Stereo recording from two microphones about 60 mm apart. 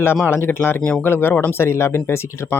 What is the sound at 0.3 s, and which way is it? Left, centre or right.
Speech, left.